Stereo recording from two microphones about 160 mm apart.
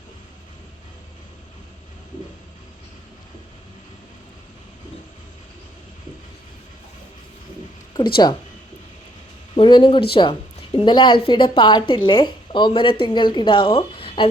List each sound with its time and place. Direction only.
8.1 s a woman's voice: 30° left (ahead or behind)
9.6 s a woman's voice: 30° left (ahead or behind)